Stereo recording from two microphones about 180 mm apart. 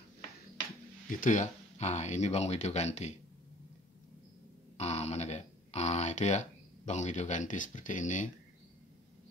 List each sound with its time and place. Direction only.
1.1 s speech: 45° left (ahead or behind)
4.7 s a sound: 35° left (ahead or behind)
6.9 s speech: 40° left (ahead or behind)